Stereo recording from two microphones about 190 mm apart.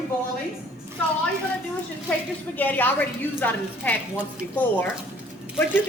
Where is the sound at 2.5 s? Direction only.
10° left (ahead or behind).